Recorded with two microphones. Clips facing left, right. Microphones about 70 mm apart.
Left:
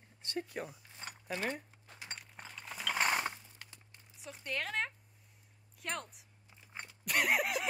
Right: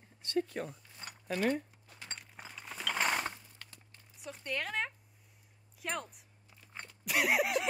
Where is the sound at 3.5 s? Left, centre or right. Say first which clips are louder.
Even; centre.